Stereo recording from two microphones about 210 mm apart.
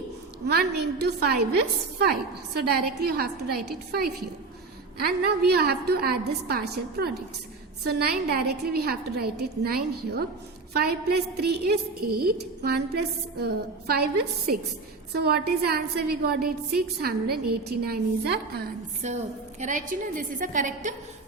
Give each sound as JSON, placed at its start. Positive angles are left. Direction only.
{"t": 0.4, "sound": "a woman's voice", "side_deg": -50}
{"t": 4.9, "sound": "a woman's voice", "side_deg": -50}
{"t": 19.0, "sound": "a woman's voice", "side_deg": -35}